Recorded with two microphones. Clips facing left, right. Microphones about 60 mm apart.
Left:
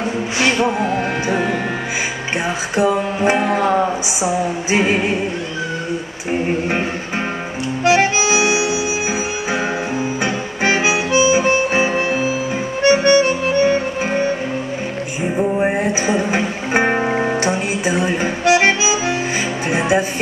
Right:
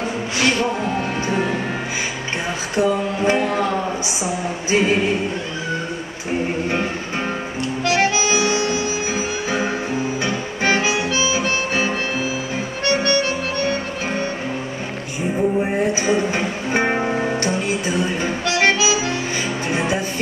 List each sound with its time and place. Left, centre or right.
2.7 s music: centre
7.8 s harmonica: centre
10.2 s harmonica: centre
12.8 s music: centre
15.3 s music: left